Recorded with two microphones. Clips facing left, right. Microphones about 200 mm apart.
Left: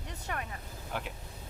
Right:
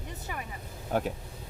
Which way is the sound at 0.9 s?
45° right (ahead or behind).